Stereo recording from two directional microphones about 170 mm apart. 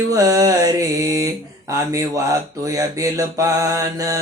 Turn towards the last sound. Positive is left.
turn(degrees=-20)  # may be behind; listen again after turning